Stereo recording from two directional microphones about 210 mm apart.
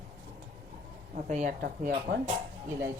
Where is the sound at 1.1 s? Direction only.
35° right (ahead or behind).